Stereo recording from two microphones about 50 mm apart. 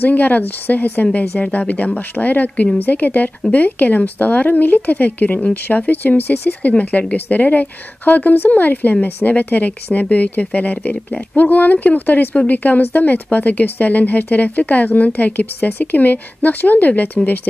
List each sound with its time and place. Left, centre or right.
0.0 s speech: left
6.8 s speech: left